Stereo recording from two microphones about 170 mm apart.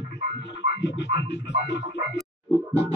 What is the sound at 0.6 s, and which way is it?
Music, 90° left.